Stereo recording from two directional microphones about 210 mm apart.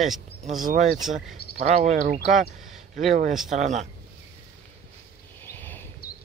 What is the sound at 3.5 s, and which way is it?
Speech, 35° right (ahead or behind).